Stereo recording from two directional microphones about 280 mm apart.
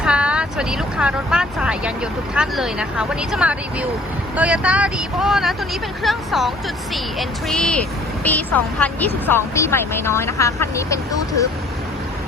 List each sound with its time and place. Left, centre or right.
0.0 s speech: centre